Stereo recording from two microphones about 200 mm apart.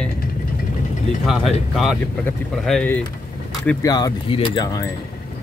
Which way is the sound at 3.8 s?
20° left (ahead or behind).